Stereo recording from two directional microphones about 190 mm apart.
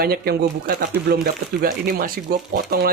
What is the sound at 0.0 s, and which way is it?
Speech, 55° right (ahead or behind).